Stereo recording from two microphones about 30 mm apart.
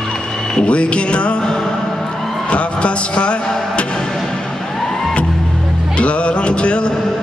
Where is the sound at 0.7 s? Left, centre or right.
Left.